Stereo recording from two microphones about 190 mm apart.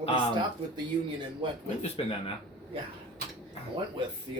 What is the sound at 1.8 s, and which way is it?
Speech, 30° left (ahead or behind).